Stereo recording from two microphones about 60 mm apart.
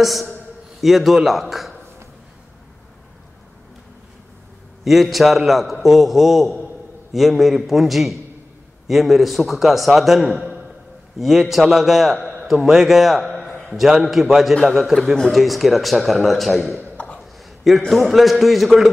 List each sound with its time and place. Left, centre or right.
0.0 s a man's voice: centre
4.8 s a man's voice: centre
16.9 s a sound: centre
17.2 s a man's voice: centre